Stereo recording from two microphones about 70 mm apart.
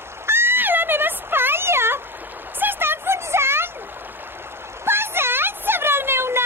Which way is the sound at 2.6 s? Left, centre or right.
Right.